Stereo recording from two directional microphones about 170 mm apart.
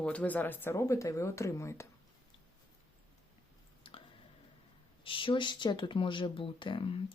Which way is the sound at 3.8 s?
30° left (ahead or behind).